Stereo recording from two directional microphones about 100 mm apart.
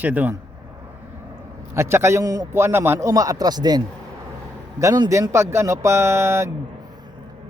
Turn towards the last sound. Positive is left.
turn(degrees=-25)  # may be behind; listen again after turning